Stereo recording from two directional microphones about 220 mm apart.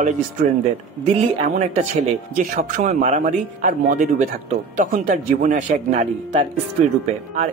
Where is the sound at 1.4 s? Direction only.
30° right (ahead or behind).